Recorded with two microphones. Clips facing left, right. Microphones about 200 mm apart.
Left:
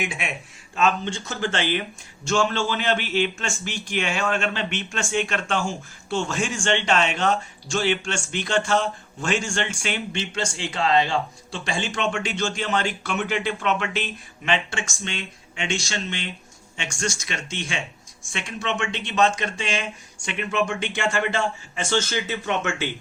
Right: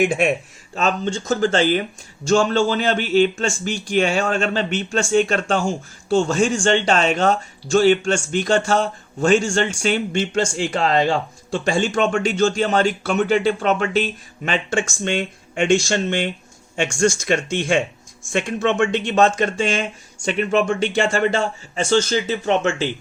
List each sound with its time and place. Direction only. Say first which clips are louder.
0.0 s a man's voice: right 12 dB; 50° right (ahead or behind)